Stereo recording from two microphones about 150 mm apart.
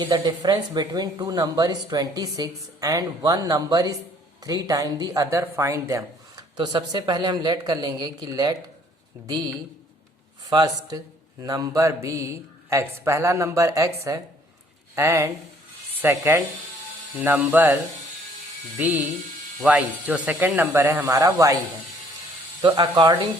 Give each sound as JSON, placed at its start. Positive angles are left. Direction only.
{"t": 0.0, "sound": "speech", "side_deg": -25}
{"t": 18.8, "sound": "speech", "side_deg": -10}
{"t": 22.6, "sound": "speech", "side_deg": -30}